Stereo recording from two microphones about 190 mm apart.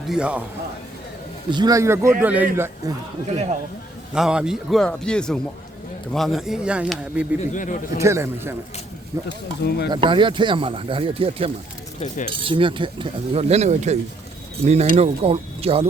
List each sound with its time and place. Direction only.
0.1 s speech: 5° right (ahead or behind)
1.5 s speech: 20° right (ahead or behind)
3.2 s speech: 35° right (ahead or behind)
4.1 s speech: 5° right (ahead or behind)
7.4 s a man's voice: 45° left (ahead or behind)
7.9 s speech: 15° right (ahead or behind)
9.6 s speech: 55° left (ahead or behind)
9.9 s speech: 25° right (ahead or behind)
11.9 s speech: 40° left (ahead or behind)
12.3 s speech: 25° right (ahead or behind)